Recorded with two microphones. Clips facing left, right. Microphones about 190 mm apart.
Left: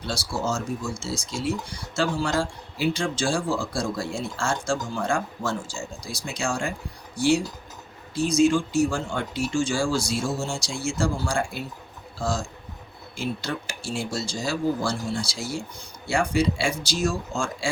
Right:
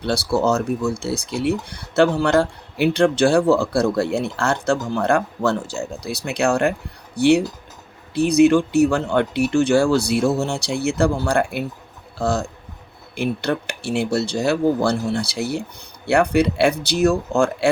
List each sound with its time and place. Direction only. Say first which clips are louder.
0.0 s speech: right 9 dB; 65° right (ahead or behind)